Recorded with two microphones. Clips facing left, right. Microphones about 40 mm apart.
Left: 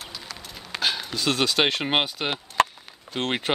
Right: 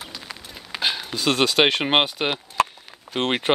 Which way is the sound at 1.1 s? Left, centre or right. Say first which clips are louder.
Right 5 dB; right.